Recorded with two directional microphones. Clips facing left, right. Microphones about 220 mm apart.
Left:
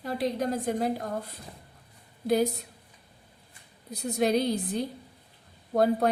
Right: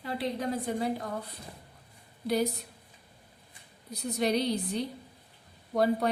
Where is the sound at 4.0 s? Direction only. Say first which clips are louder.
Left 3 dB; 45° left (ahead or behind).